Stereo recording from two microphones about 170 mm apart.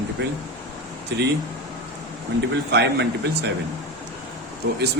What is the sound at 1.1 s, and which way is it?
Speech, 90° right.